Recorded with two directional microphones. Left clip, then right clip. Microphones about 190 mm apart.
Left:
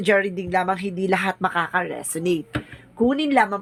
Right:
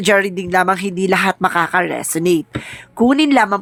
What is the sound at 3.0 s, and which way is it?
Speech, 40° right (ahead or behind).